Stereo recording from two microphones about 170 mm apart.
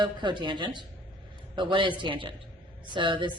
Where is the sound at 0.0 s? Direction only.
25° right (ahead or behind).